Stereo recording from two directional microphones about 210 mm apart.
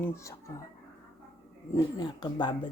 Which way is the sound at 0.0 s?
15° left (ahead or behind).